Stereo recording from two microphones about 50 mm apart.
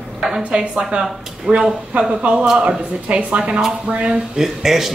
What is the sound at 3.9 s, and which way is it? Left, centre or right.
Speech, right.